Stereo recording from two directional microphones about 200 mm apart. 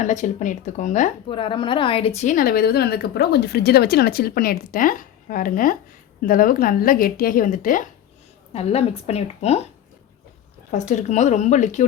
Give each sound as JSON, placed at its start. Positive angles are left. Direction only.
{"t": 0.0, "sound": "speech", "side_deg": 35}
{"t": 1.3, "sound": "a woman's voice", "side_deg": 25}
{"t": 8.5, "sound": "speech", "side_deg": 30}
{"t": 10.7, "sound": "speech", "side_deg": 35}